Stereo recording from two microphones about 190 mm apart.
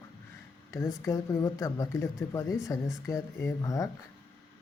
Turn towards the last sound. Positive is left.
turn(degrees=15)  # may be behind; listen again after turning